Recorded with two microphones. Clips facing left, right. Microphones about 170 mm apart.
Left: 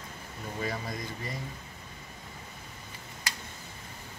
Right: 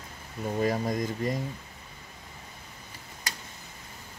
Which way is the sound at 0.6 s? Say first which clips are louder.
Right 8 dB; 45° right (ahead or behind).